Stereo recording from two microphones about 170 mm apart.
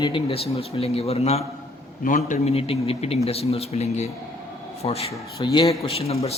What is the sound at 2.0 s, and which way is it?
A man's voice, 50° left (ahead or behind).